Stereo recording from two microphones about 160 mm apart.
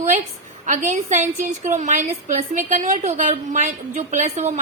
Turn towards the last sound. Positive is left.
turn(degrees=-45)  # may be behind; listen again after turning